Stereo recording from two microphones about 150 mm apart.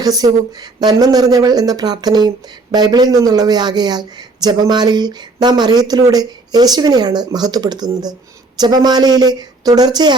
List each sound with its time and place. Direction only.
0.0 s speech: 25° right (ahead or behind)